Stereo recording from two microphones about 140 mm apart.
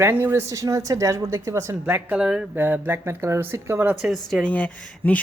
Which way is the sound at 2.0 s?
5° right (ahead or behind).